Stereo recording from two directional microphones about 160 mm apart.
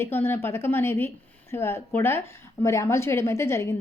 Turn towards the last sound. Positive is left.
turn(degrees=15)  # may be behind; listen again after turning